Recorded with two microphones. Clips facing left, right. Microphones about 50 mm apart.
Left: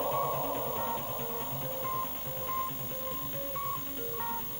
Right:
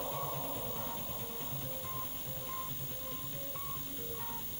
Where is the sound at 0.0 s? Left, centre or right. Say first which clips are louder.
Left 9 dB; left.